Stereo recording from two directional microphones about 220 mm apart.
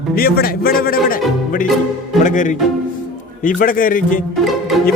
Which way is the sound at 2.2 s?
35° left (ahead or behind).